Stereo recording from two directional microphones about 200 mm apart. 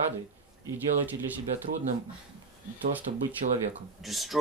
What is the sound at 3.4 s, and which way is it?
Speech, 40° right (ahead or behind).